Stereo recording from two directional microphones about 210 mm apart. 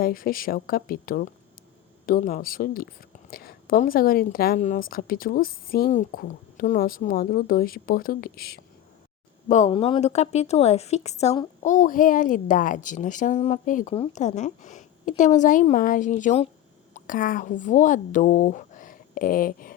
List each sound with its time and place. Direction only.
0.0 s speech: 45° left (ahead or behind)
9.5 s speech: 30° left (ahead or behind)